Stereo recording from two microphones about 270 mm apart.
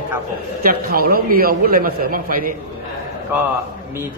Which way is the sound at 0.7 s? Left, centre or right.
Right.